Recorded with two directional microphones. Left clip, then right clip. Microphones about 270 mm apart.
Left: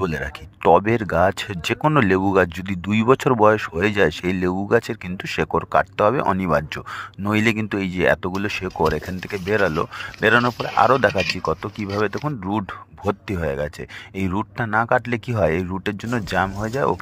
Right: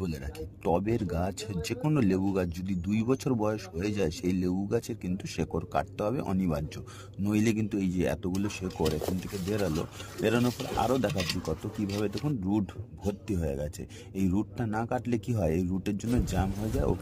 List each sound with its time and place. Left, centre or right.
0.0 s speech: centre
10.2 s speech: centre
12.5 s speech: centre